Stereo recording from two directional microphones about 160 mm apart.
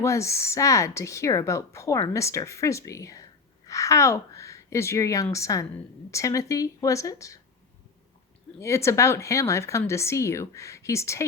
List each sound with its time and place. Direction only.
0.0 s a woman's voice: 20° left (ahead or behind)
8.5 s speech: 15° left (ahead or behind)